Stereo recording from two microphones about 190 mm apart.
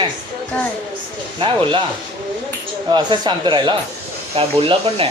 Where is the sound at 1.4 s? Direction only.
25° right (ahead or behind).